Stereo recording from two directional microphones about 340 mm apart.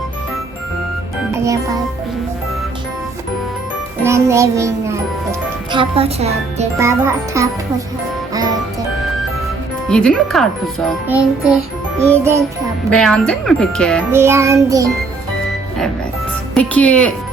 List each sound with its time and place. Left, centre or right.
1.3 s music: centre
4.0 s music: centre
9.9 s a child's voice: centre
11.9 s music: centre
12.9 s a child's voice: centre
16.6 s a child's voice: centre